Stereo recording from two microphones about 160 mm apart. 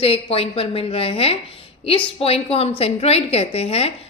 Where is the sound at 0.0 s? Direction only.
35° left (ahead or behind).